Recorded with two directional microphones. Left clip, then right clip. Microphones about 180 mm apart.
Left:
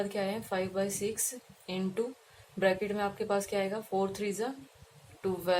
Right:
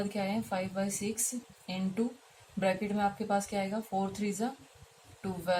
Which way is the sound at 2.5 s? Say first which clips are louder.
Left 2 dB; 55° left (ahead or behind).